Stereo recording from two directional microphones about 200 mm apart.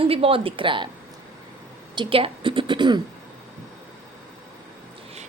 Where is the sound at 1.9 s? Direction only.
25° right (ahead or behind).